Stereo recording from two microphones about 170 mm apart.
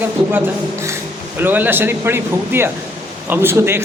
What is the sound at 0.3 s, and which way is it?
A man's voice, 10° right (ahead or behind).